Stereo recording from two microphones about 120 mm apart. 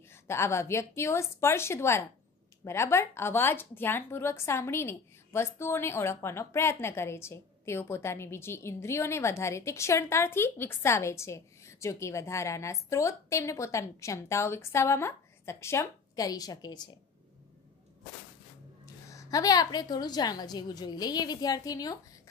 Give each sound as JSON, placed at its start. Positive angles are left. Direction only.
{"t": 0.1, "sound": "speech", "side_deg": 20}
{"t": 19.0, "sound": "a woman's voice", "side_deg": 25}